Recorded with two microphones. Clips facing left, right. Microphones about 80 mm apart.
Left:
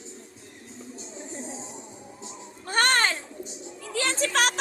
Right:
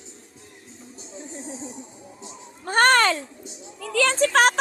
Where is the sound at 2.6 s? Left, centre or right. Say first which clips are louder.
Right 6 dB; right.